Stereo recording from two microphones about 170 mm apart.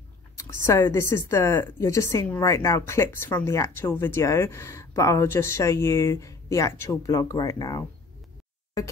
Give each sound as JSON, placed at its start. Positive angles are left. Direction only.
{"t": 0.4, "sound": "speech", "side_deg": 15}